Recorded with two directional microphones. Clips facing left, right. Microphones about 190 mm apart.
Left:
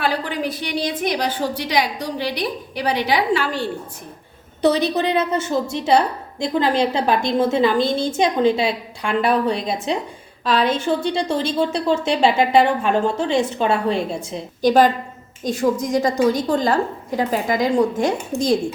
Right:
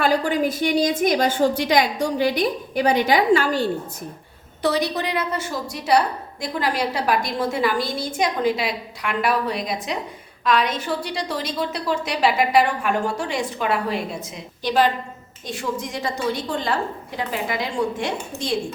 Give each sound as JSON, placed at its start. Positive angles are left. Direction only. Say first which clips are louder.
{"t": 0.0, "sound": "a woman's voice", "louder": "right 3 dB", "side_deg": -45}
{"t": 4.6, "sound": "a woman's voice", "louder": "left 5 dB", "side_deg": 20}
{"t": 14.6, "sound": "a woman's voice", "louder": "left 5 dB", "side_deg": 45}